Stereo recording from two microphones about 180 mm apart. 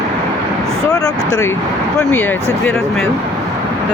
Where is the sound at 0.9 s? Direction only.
20° left (ahead or behind).